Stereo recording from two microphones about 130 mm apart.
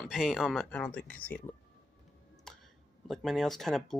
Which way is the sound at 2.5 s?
5° left (ahead or behind).